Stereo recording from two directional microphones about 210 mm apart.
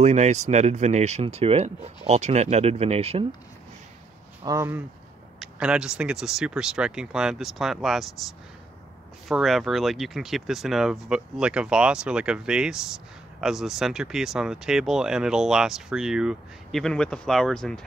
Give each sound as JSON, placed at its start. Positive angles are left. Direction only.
{"t": 0.0, "sound": "speech", "side_deg": -35}
{"t": 4.5, "sound": "speech", "side_deg": -10}
{"t": 9.3, "sound": "speech", "side_deg": 0}